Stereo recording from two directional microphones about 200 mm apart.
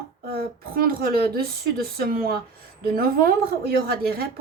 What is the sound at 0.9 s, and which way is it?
A woman's voice, 45° right (ahead or behind).